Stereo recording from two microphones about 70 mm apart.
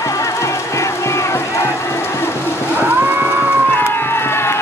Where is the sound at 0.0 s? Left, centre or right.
Left.